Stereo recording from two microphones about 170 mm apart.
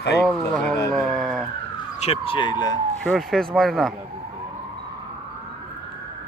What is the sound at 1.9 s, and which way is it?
Speech, 35° left (ahead or behind).